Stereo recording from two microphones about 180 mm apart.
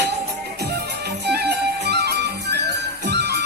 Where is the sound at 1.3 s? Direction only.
65° right (ahead or behind).